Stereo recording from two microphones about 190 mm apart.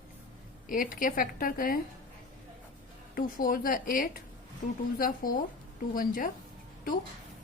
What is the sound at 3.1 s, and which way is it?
A woman's voice, 45° left (ahead or behind).